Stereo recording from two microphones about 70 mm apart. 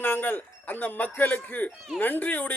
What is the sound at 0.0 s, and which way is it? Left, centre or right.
Speech, left.